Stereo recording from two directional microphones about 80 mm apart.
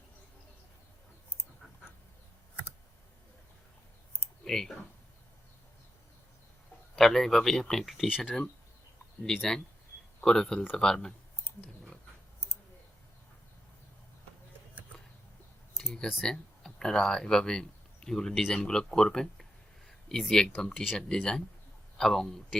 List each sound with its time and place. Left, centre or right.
4.4 s speech: centre
6.9 s speech: centre
9.2 s speech: centre
15.8 s a sound: left
16.2 s speech: centre